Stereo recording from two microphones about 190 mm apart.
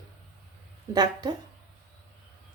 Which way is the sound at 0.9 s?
20° right (ahead or behind).